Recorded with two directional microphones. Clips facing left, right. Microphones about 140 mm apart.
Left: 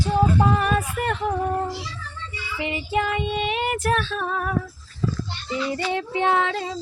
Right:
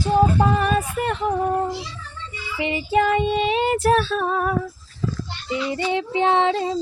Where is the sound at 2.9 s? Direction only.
40° right (ahead or behind).